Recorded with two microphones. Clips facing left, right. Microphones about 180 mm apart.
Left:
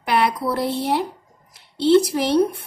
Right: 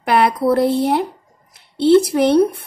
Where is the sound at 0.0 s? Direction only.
50° right (ahead or behind).